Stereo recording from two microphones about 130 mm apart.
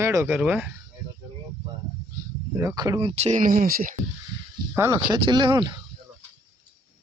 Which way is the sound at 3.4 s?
90° right.